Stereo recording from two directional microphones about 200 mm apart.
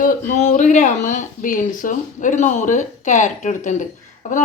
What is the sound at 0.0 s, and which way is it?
A woman's voice, 40° left (ahead or behind).